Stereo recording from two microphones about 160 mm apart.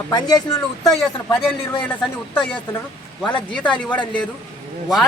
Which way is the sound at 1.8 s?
10° left (ahead or behind).